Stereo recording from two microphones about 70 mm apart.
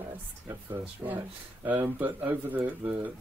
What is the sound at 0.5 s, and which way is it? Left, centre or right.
Speech, right.